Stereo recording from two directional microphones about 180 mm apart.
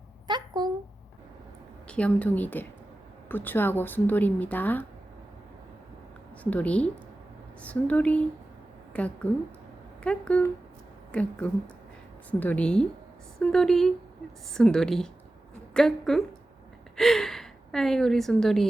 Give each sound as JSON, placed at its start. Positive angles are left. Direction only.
{"t": 0.3, "sound": "a sound", "side_deg": -25}
{"t": 1.9, "sound": "speech", "side_deg": 5}
{"t": 6.4, "sound": "a woman's voice", "side_deg": 10}